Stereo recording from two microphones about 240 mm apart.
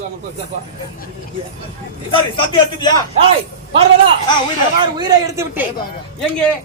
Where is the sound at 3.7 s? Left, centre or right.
Right.